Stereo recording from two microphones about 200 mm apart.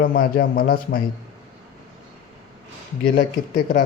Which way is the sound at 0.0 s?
50° left (ahead or behind).